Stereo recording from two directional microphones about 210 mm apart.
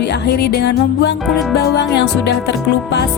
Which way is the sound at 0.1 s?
50° left (ahead or behind).